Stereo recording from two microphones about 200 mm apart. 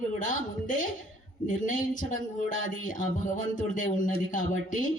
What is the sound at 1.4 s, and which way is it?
Speech, 40° left (ahead or behind).